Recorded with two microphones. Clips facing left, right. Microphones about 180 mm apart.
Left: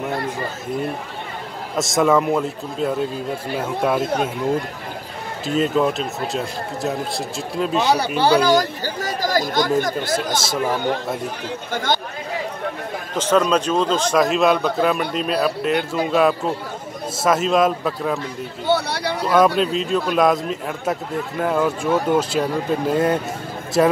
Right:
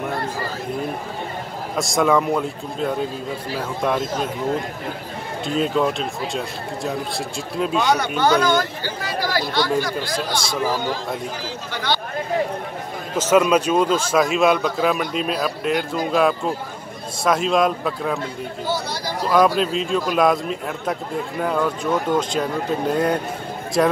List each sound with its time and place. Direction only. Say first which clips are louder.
1.8 s a man's voice: left 1 dB; centre (ahead or behind)
4.0 s speech: left 3 dB; 65° left (ahead or behind)
5.6 s a man's voice: left 2 dB; centre (ahead or behind)
8.2 s speech: left 3 dB; 35° left (ahead or behind)
11.4 s speech: left 5 dB; 45° left (ahead or behind)
13.3 s a man's voice: right 1 dB; 10° right (ahead or behind)
18.7 s speech: left 6 dB; 65° left (ahead or behind)
19.2 s a man's voice: left 1 dB; centre (ahead or behind)